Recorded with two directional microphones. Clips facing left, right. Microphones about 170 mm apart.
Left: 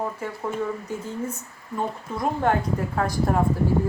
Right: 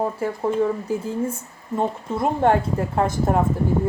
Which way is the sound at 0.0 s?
30° right (ahead or behind).